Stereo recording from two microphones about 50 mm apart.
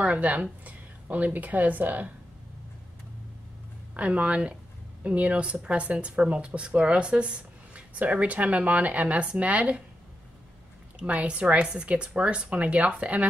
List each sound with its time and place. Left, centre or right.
0.0 s a woman's voice: right
3.9 s speech: right
11.0 s speech: right